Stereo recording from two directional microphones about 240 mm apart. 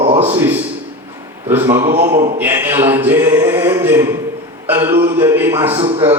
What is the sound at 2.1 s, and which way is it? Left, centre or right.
Speech, right.